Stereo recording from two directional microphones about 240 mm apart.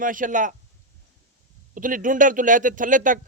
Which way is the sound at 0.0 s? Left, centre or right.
Right.